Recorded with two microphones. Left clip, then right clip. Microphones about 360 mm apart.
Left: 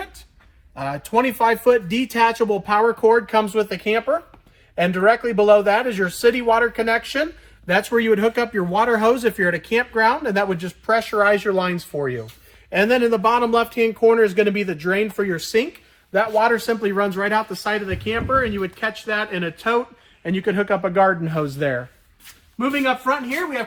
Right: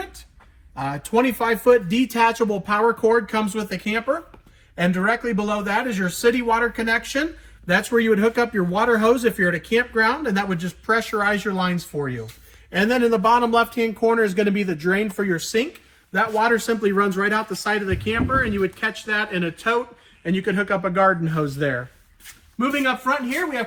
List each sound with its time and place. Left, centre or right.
1.5 s speech: centre